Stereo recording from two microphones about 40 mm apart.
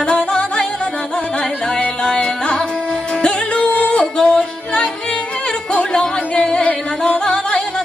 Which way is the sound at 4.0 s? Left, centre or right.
Centre.